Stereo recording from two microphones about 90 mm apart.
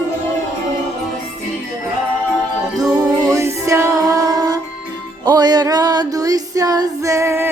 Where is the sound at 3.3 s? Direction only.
35° right (ahead or behind); by 5.6 s 50° right (ahead or behind).